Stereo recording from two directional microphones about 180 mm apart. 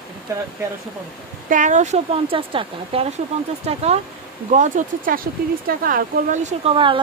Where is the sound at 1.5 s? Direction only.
45° right (ahead or behind).